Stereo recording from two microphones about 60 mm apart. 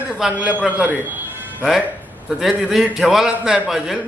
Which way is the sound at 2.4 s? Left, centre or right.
Centre.